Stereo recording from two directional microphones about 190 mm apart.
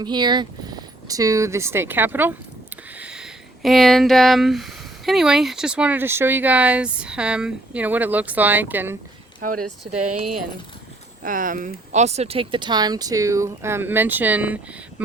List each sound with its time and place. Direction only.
0.0 s speech: 25° right (ahead or behind)
11.2 s speech: 45° right (ahead or behind); by 15.0 s 10° right (ahead or behind)